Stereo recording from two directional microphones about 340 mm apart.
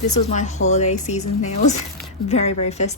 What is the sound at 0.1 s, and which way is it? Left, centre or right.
A woman's voice, centre.